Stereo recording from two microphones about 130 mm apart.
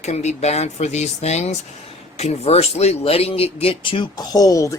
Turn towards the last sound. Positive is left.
turn(degrees=25)  # may be behind; listen again after turning